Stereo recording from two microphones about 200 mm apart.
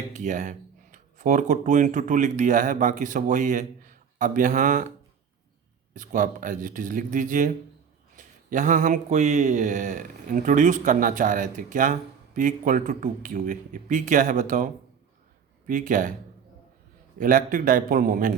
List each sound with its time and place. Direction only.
0.1 s speech: 40° right (ahead or behind)
5.9 s speech: 40° right (ahead or behind)
17.2 s a man's voice: 45° right (ahead or behind)